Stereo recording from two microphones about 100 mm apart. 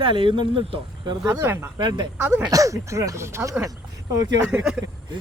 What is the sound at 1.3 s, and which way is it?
Speech, 25° right (ahead or behind).